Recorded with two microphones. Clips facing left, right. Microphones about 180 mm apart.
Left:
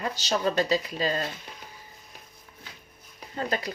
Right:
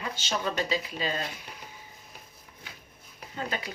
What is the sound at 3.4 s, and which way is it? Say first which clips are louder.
Speech: left 5 dB; 40° left (ahead or behind).